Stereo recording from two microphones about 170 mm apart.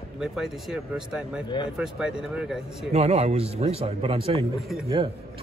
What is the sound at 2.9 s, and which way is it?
Speech, 40° right (ahead or behind).